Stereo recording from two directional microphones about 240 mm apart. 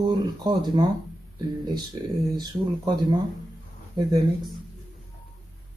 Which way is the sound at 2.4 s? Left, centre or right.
Centre.